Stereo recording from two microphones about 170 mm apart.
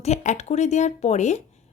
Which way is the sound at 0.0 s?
45° left (ahead or behind).